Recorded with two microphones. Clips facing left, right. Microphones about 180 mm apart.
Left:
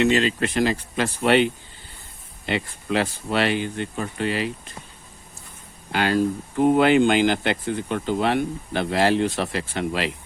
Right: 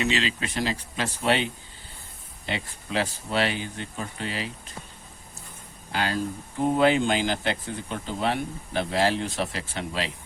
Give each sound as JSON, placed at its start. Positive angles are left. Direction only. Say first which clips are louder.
{"t": 0.0, "sound": "speech", "louder": "left 7 dB", "side_deg": 50}
{"t": 2.5, "sound": "speech", "louder": "left 7 dB", "side_deg": 60}
{"t": 5.9, "sound": "speech", "louder": "left 7 dB", "side_deg": 65}